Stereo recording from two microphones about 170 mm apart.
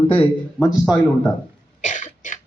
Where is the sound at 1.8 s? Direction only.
45° left (ahead or behind).